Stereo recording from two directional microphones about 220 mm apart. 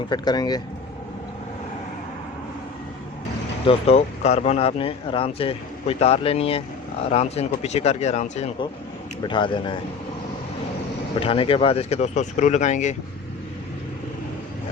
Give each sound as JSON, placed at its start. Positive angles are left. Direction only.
{"t": 0.1, "sound": "speech", "side_deg": 20}
{"t": 3.7, "sound": "speech", "side_deg": 30}
{"t": 11.2, "sound": "speech", "side_deg": 25}